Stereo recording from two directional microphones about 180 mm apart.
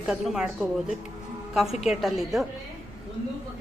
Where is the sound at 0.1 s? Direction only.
5° right (ahead or behind).